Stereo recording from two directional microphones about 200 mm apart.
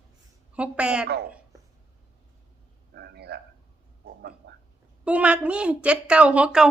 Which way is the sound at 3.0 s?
55° right (ahead or behind).